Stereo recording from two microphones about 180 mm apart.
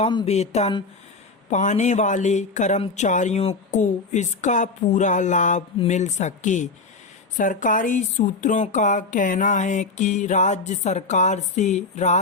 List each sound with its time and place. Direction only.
0.1 s speech: 25° left (ahead or behind)
0.3 s speech: 35° left (ahead or behind)